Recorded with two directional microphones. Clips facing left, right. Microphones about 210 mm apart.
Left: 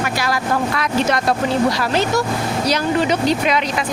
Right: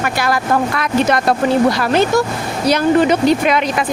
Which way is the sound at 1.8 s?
55° right (ahead or behind).